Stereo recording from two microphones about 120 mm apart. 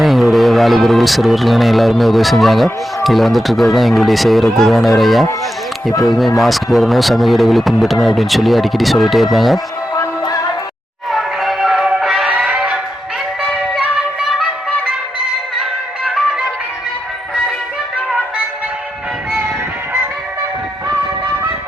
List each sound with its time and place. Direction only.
0.0 s a man's voice: centre (ahead or behind)
9.9 s music: 30° left (ahead or behind)
11.1 s music: centre (ahead or behind)
13.4 s music: 5° left (ahead or behind)
13.9 s music: 5° right (ahead or behind)